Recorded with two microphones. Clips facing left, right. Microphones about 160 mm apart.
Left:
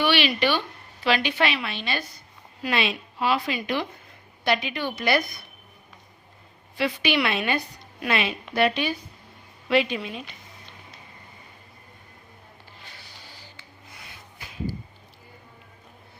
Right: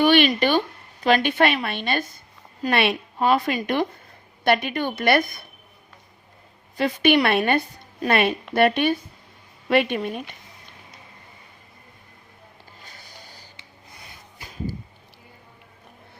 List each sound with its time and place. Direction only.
0.0 s a woman's voice: 45° right (ahead or behind)
6.7 s a woman's voice: 50° right (ahead or behind)
12.8 s music: 45° right (ahead or behind)